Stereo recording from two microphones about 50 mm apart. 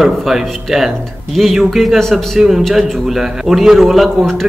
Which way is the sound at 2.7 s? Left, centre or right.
Centre.